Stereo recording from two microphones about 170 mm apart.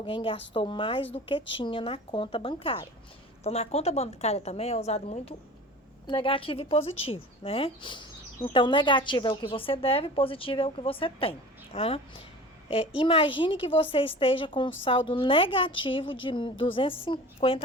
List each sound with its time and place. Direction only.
0.0 s a woman's voice: 30° left (ahead or behind)